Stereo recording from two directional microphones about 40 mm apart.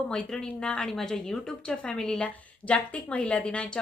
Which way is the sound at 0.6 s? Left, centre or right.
Left.